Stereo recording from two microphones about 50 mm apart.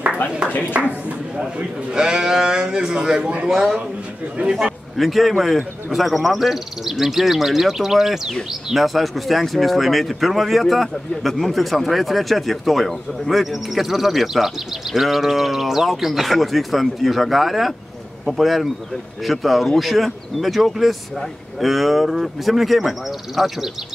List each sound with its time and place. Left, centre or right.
0.5 s speech: left
1.4 s speech: centre
3.2 s a man's voice: right
3.4 s speech: centre
4.9 s speech: centre